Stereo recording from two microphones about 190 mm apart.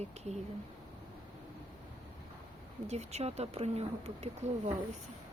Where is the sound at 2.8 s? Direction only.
35° right (ahead or behind).